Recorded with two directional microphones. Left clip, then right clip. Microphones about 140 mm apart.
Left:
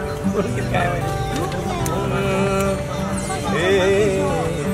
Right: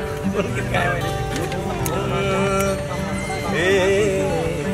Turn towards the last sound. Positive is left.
turn(degrees=-10)  # may be behind; listen again after turning